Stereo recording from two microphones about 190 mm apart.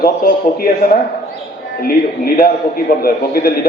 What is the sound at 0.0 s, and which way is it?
Speech, 50° left (ahead or behind).